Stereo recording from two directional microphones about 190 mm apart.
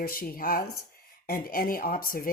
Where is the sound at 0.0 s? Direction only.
50° left (ahead or behind).